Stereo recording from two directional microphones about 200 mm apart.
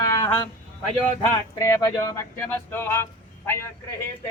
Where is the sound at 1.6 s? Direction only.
15° left (ahead or behind).